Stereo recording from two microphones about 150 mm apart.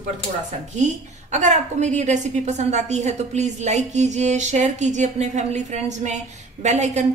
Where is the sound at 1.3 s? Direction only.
50° right (ahead or behind).